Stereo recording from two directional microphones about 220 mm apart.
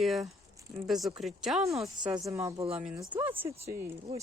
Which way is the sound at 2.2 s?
15° right (ahead or behind).